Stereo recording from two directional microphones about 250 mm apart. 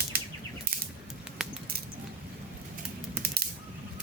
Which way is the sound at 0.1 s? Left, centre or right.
Right.